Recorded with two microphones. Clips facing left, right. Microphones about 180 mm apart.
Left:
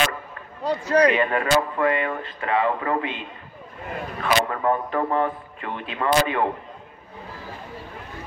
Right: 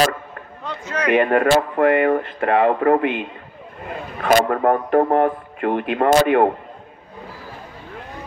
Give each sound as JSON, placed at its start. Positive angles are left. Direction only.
{"t": 0.7, "sound": "a man's voice", "side_deg": 35}
{"t": 1.1, "sound": "speech", "side_deg": -55}